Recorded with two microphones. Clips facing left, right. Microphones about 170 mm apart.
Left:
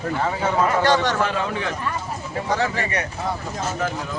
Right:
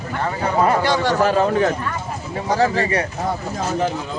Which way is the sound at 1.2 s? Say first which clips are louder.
Right 7 dB; 40° right (ahead or behind).